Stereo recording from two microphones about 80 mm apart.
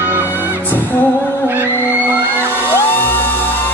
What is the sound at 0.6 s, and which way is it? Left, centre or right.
Music, left.